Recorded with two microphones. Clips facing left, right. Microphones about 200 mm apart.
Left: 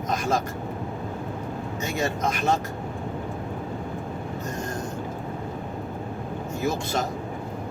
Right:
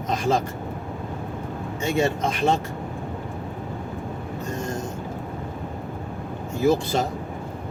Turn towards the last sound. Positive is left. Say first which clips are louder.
# right 6 dB
turn(degrees=-30)  # may be behind; listen again after turning